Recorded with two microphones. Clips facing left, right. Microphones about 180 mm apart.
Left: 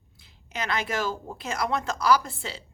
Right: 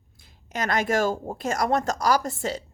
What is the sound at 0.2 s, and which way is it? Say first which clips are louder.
A woman's voice: right 4 dB; 50° right (ahead or behind).